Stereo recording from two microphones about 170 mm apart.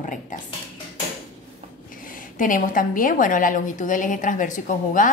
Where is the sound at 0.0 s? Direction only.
45° left (ahead or behind).